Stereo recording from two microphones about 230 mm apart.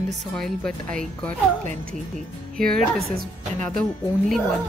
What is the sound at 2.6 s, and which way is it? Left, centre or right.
A woman's voice, centre.